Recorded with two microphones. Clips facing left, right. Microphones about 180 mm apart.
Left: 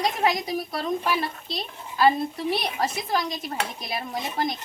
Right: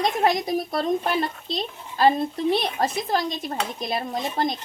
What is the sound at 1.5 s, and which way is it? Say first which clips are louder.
A child's voice: right 4 dB; 25° right (ahead or behind).